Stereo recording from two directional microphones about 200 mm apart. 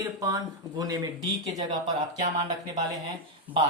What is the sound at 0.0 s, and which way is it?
Speech, 15° right (ahead or behind).